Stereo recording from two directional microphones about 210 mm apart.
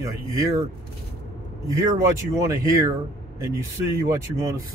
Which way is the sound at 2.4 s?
15° right (ahead or behind).